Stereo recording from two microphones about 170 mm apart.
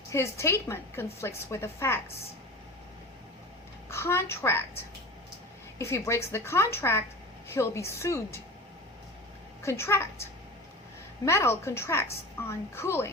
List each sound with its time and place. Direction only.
0.1 s a woman's voice: 15° left (ahead or behind)
3.8 s a woman's voice: 15° left (ahead or behind)
5.8 s a woman's voice: 15° left (ahead or behind)
9.6 s a woman's voice: 15° left (ahead or behind)
11.3 s a woman's voice: 15° left (ahead or behind)